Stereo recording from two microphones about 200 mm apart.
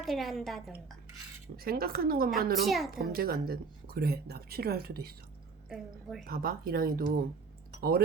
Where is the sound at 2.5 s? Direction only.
Centre (ahead or behind).